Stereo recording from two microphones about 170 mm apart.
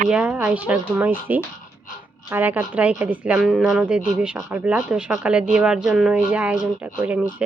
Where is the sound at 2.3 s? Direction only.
10° right (ahead or behind).